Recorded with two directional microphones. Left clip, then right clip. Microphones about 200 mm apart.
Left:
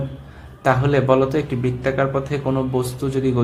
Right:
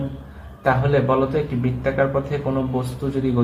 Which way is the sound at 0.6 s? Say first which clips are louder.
Left 1 dB; 45° left (ahead or behind).